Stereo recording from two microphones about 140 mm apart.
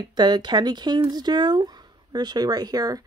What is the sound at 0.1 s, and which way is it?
Speech, 30° right (ahead or behind).